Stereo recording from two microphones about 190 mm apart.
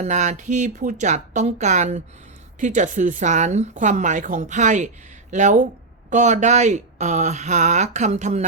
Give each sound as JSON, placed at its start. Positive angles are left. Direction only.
{"t": 0.0, "sound": "speech", "side_deg": -40}